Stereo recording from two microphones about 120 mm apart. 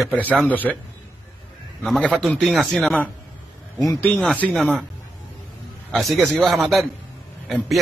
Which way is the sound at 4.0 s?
15° left (ahead or behind).